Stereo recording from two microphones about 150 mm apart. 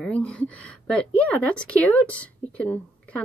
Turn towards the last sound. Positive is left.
turn(degrees=10)  # may be behind; listen again after turning